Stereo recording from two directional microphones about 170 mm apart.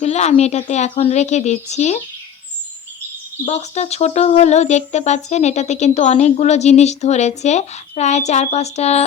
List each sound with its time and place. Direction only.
0.0 s speech: 40° left (ahead or behind)
3.4 s speech: 40° left (ahead or behind)